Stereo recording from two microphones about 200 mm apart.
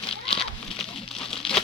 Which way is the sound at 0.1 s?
30° left (ahead or behind).